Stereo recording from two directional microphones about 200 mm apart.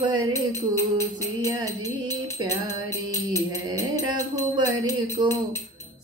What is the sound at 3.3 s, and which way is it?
Music, 15° left (ahead or behind).